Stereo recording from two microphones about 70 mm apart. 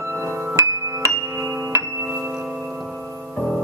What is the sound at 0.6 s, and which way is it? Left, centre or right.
Music, right.